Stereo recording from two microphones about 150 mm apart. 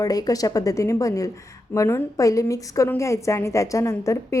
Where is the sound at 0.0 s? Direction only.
25° left (ahead or behind).